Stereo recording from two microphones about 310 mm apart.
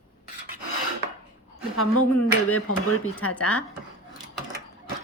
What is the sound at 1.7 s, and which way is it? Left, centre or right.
Speech, left.